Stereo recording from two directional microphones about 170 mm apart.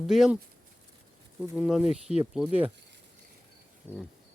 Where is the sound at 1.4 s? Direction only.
Centre (ahead or behind).